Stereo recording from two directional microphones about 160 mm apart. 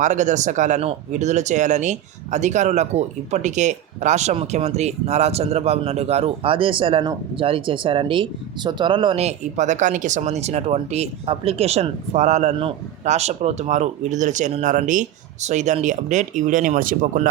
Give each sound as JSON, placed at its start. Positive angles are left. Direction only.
{"t": 0.0, "sound": "speech", "side_deg": -50}